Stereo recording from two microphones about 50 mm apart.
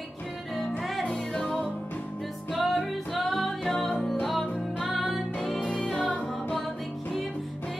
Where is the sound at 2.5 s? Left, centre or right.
Centre.